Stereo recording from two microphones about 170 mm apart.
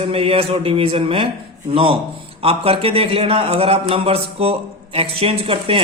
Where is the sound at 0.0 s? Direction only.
35° right (ahead or behind).